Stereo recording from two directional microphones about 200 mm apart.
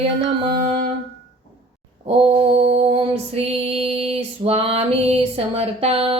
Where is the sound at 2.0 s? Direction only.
30° right (ahead or behind).